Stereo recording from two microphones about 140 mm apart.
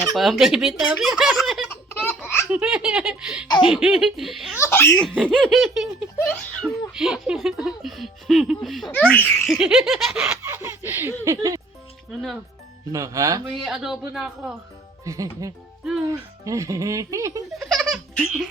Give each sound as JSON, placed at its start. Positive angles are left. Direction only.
{"t": 0.1, "sound": "speech", "side_deg": 0}
{"t": 1.7, "sound": "a sound", "side_deg": 15}
{"t": 2.5, "sound": "speech", "side_deg": -5}
{"t": 4.6, "sound": "speech", "side_deg": 15}
{"t": 4.9, "sound": "speech", "side_deg": 0}
{"t": 6.1, "sound": "giggle", "side_deg": 10}
{"t": 6.9, "sound": "speech", "side_deg": -5}
{"t": 9.5, "sound": "speech", "side_deg": -5}
{"t": 10.4, "sound": "speech", "side_deg": -15}
{"t": 12.9, "sound": "speech", "side_deg": -25}
{"t": 13.5, "sound": "speech", "side_deg": 0}
{"t": 15.0, "sound": "speech", "side_deg": -25}
{"t": 17.5, "sound": "laughter", "side_deg": 0}